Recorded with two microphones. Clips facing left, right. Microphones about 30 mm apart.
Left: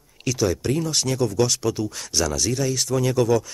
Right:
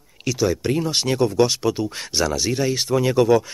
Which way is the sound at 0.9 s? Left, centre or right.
Right.